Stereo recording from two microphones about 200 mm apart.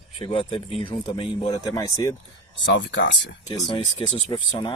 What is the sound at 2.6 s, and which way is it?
Speech, 65° left (ahead or behind).